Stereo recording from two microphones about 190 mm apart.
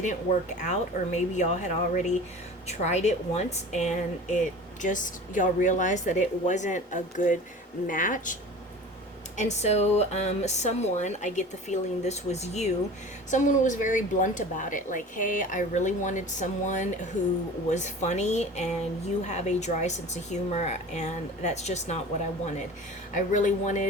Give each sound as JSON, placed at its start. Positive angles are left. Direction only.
{"t": 0.0, "sound": "a woman's voice", "side_deg": 40}
{"t": 9.4, "sound": "a woman's voice", "side_deg": 35}
{"t": 23.1, "sound": "speech", "side_deg": 40}